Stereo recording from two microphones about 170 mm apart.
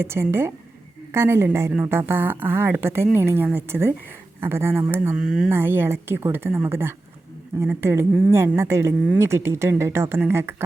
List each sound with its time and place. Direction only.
0.0 s a woman's voice: 15° right (ahead or behind)